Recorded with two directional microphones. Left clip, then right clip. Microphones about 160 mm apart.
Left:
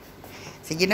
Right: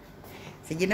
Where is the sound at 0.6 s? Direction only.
5° right (ahead or behind).